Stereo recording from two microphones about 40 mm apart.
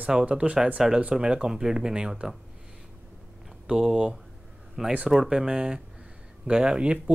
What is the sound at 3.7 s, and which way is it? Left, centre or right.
Speech, centre.